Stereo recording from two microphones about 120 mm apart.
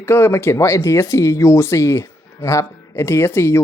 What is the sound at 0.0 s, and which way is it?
Speech, 20° left (ahead or behind).